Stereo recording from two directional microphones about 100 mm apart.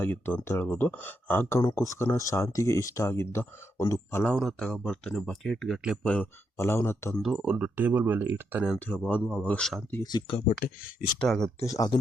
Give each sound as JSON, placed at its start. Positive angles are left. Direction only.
{"t": 0.0, "sound": "speech", "side_deg": 20}
{"t": 4.3, "sound": "speech", "side_deg": 5}
{"t": 6.0, "sound": "speech", "side_deg": 10}
{"t": 6.6, "sound": "speech", "side_deg": 25}
{"t": 7.2, "sound": "speech", "side_deg": 0}
{"t": 8.8, "sound": "speech", "side_deg": 15}
{"t": 10.0, "sound": "speech", "side_deg": 45}
{"t": 11.2, "sound": "speech", "side_deg": 5}
{"t": 11.6, "sound": "speech", "side_deg": 35}